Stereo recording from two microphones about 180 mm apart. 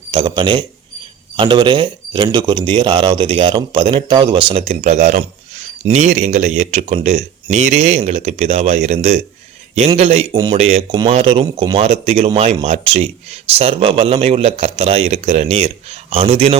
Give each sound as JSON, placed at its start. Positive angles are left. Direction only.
{"t": 0.1, "sound": "speech", "side_deg": -25}
{"t": 10.3, "sound": "speech", "side_deg": -20}
{"t": 10.6, "sound": "speech", "side_deg": -35}